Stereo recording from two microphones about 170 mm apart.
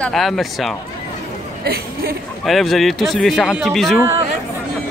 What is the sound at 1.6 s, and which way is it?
Speech, 65° right (ahead or behind).